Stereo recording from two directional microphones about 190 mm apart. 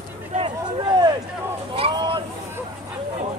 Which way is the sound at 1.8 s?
25° right (ahead or behind).